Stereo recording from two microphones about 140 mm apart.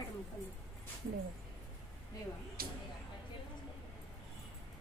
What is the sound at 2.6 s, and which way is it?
Speech, 90° right.